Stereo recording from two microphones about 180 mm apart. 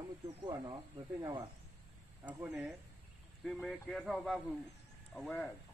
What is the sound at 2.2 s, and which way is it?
Speech, 5° right (ahead or behind).